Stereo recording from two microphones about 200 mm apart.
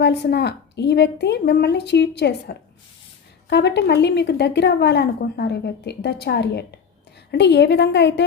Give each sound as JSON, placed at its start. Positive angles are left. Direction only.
{"t": 0.0, "sound": "a woman's voice", "side_deg": 55}